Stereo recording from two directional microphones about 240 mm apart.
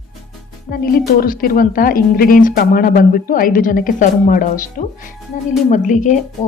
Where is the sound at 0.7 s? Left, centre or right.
Left.